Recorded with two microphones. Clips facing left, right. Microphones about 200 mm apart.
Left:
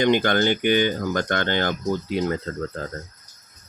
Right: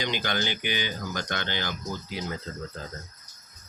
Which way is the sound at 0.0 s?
55° left (ahead or behind).